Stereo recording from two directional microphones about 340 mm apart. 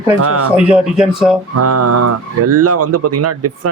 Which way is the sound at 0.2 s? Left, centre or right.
Right.